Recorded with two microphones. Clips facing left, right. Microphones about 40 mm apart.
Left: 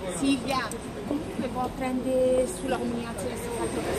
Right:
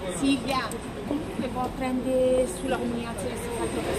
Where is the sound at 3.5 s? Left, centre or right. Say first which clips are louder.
Right 1 dB; right.